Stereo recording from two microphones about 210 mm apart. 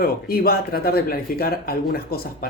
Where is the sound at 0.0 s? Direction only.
45° left (ahead or behind).